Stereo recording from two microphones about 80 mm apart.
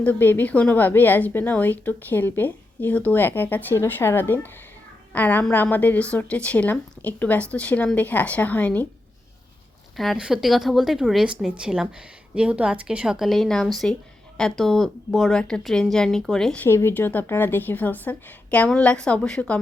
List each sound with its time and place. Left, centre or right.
0.0 s a woman's voice: left
10.2 s speech: centre
16.6 s a woman's voice: left; by 19.5 s centre